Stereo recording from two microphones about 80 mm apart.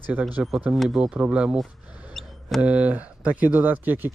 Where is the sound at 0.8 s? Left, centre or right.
Centre.